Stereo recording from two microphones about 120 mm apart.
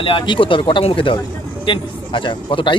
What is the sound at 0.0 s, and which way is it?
Speech, 45° left (ahead or behind).